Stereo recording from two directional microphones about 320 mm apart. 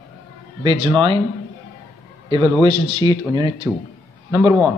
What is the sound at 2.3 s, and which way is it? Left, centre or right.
Speech, centre.